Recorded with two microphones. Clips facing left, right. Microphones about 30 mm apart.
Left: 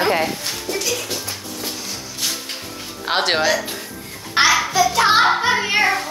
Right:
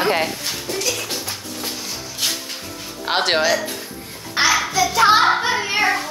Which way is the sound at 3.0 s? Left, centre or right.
Centre.